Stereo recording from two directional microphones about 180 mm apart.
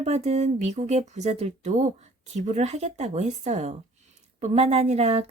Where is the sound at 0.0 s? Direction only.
35° right (ahead or behind).